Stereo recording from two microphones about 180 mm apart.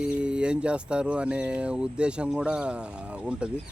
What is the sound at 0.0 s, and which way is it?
Speech, 5° right (ahead or behind).